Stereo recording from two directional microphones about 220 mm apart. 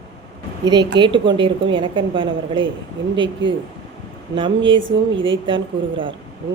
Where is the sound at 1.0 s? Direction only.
20° right (ahead or behind).